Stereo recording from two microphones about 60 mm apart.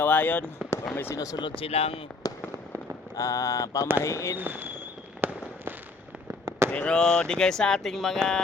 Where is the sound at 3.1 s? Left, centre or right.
Left.